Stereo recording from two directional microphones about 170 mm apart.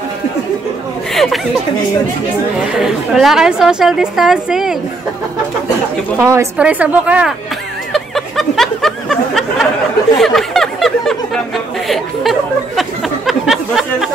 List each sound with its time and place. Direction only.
1.1 s chatter: centre (ahead or behind)
2.8 s a woman's voice: centre (ahead or behind)
6.1 s a woman's voice: 15° right (ahead or behind)
7.9 s a sound: centre (ahead or behind)